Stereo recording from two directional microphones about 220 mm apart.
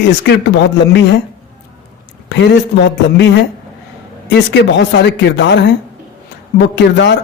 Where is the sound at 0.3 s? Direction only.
50° left (ahead or behind).